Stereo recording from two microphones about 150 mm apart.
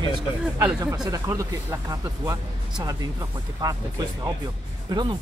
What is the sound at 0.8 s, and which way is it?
Speech, 25° right (ahead or behind).